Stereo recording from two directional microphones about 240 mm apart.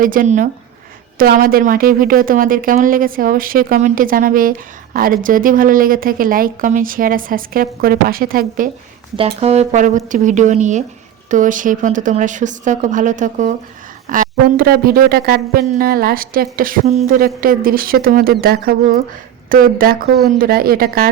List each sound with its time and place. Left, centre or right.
0.0 s speech: right
9.1 s a woman's voice: right